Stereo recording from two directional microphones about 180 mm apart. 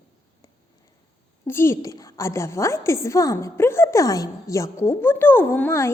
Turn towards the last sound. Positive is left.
turn(degrees=15)  # may be behind; listen again after turning